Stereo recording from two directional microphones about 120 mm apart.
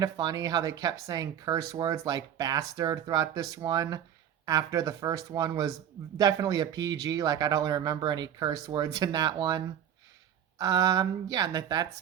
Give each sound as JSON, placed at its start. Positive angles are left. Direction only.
{"t": 0.0, "sound": "speech", "side_deg": -30}